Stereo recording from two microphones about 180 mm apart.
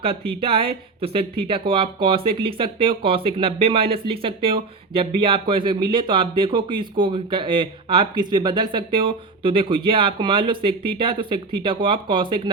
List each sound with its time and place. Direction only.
0.0 s speech: 30° right (ahead or behind)